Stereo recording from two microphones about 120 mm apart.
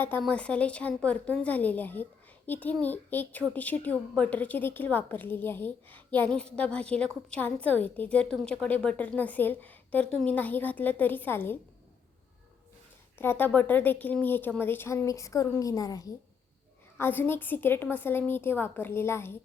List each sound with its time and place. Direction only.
0.2 s a woman's voice: 10° left (ahead or behind)
13.1 s a woman's voice: 15° left (ahead or behind)
17.0 s a woman's voice: 15° left (ahead or behind)